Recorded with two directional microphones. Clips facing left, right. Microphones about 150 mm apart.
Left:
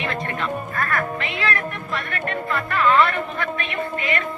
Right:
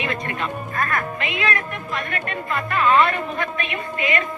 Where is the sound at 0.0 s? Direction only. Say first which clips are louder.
Even; 15° right (ahead or behind).